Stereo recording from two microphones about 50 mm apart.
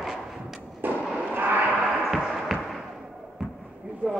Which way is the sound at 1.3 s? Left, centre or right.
Right.